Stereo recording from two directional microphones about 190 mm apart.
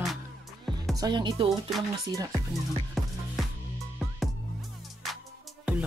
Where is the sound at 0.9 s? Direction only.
20° right (ahead or behind).